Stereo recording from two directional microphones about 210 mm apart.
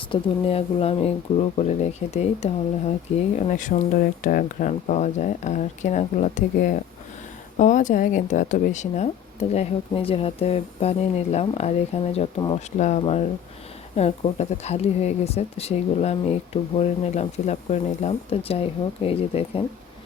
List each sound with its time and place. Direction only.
0.1 s speech: 25° left (ahead or behind)